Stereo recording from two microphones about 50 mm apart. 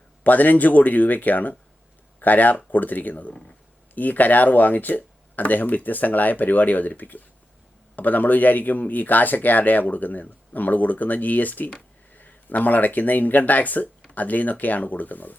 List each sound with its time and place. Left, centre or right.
0.3 s speech: left